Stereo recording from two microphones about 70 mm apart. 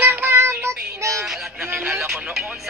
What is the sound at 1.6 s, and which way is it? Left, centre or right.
Speech, right.